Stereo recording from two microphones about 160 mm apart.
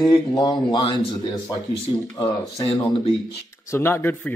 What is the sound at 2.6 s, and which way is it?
Speech, 35° left (ahead or behind).